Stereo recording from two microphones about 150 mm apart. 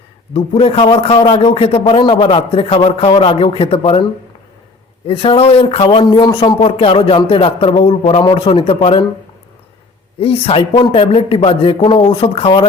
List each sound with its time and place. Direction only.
0.3 s a man's voice: 40° left (ahead or behind)
10.2 s a man's voice: 40° left (ahead or behind)